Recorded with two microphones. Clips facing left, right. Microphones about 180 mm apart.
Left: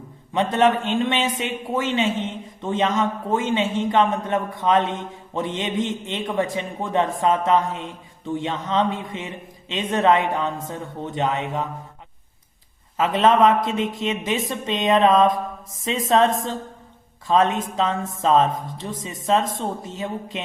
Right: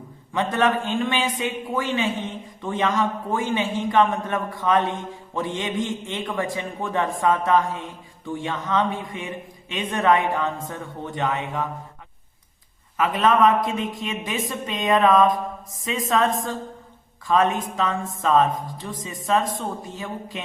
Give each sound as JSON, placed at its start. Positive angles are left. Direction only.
{"t": 0.5, "sound": "a man's voice", "side_deg": 25}
{"t": 13.0, "sound": "a man's voice", "side_deg": 25}